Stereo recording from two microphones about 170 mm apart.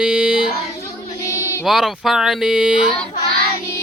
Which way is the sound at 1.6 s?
Centre (ahead or behind).